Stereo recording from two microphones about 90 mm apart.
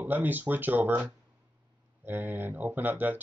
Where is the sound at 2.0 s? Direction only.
20° right (ahead or behind).